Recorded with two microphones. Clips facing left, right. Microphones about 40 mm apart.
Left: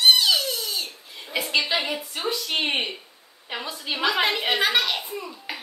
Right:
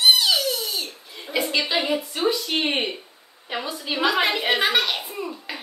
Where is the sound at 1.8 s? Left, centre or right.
Right.